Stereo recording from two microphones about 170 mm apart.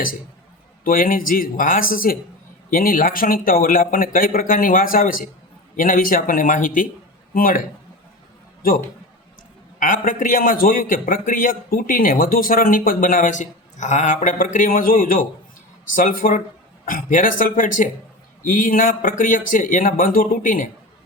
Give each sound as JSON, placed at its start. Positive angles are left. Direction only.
{"t": 0.9, "sound": "a man's voice", "side_deg": 55}
{"t": 8.6, "sound": "a man's voice", "side_deg": 55}
{"t": 9.8, "sound": "a man's voice", "side_deg": 55}